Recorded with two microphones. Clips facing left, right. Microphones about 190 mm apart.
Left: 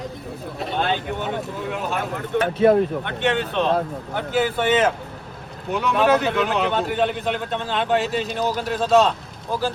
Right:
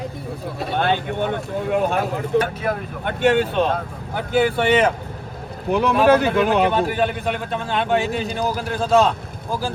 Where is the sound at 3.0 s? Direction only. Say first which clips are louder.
Right 5 dB; 40° right (ahead or behind).